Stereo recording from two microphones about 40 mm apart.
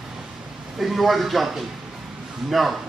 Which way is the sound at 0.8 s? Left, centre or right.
Centre.